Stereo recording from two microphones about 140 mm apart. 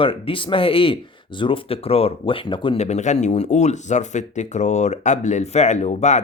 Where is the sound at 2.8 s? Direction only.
55° left (ahead or behind).